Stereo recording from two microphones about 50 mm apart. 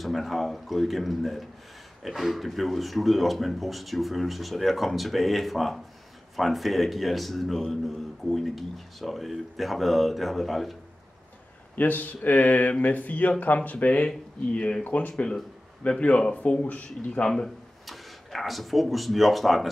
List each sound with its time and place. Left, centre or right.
0.0 s speech: centre
11.7 s speech: left
14.0 s speech: left
17.8 s speech: centre